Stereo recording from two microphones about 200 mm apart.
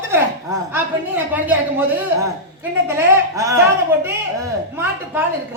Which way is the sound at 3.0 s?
15° right (ahead or behind).